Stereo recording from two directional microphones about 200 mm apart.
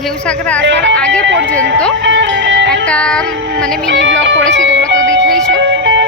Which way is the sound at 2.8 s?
5° left (ahead or behind).